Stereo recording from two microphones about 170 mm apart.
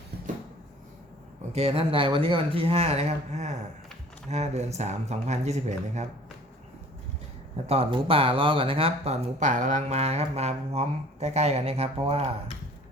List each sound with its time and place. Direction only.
1.5 s speech: 35° right (ahead or behind)
7.7 s speech: 35° right (ahead or behind)